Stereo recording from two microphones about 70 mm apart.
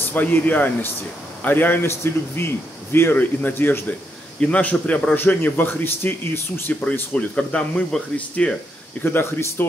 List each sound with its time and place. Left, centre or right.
0.0 s a man's voice: left
4.4 s a man's voice: centre; by 6.6 s left
6.7 s a man's voice: left
9.0 s speech: left